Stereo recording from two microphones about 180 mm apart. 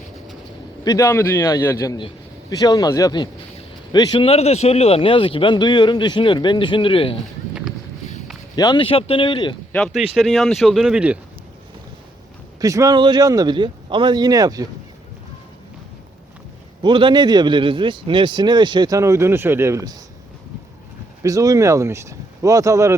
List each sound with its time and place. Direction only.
0.9 s a man's voice: 15° left (ahead or behind)
8.5 s speech: 25° left (ahead or behind)
9.7 s speech: centre (ahead or behind)
12.5 s a man's voice: 20° right (ahead or behind)
16.8 s a man's voice: 25° right (ahead or behind)
21.2 s speech: 20° right (ahead or behind)